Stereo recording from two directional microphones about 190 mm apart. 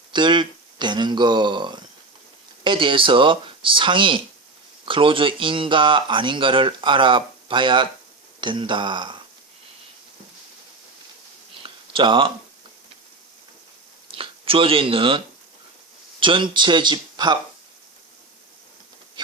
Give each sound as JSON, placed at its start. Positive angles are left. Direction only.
{"t": 0.1, "sound": "speech", "side_deg": -25}
{"t": 11.6, "sound": "a sound", "side_deg": -25}
{"t": 14.2, "sound": "speech", "side_deg": -30}
{"t": 16.2, "sound": "speech", "side_deg": -25}